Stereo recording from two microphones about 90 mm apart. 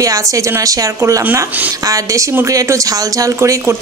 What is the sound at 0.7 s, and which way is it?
Speech, 40° right (ahead or behind).